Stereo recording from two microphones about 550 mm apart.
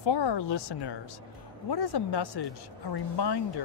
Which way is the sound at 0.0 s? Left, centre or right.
Left.